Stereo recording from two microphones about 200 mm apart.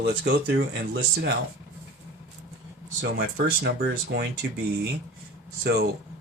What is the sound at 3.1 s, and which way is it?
Speech, 55° right (ahead or behind).